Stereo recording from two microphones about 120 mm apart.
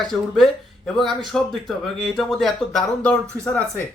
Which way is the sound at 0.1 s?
Centre (ahead or behind).